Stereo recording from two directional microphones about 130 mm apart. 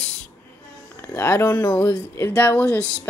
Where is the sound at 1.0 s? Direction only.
20° left (ahead or behind).